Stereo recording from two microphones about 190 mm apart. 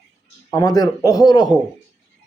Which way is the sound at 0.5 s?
20° left (ahead or behind).